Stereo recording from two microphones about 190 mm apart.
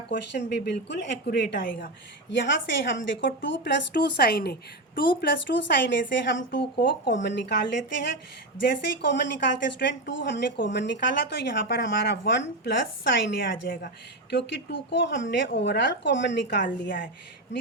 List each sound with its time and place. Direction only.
0.1 s speech: 65° left (ahead or behind)
2.3 s speech: 70° left (ahead or behind)
16.6 s a woman's voice: 45° left (ahead or behind)